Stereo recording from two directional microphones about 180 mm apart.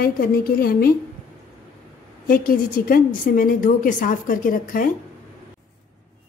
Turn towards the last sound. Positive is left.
turn(degrees=50)  # may be behind; listen again after turning